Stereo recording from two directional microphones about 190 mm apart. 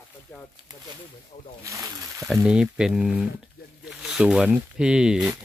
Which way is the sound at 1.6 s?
15° right (ahead or behind).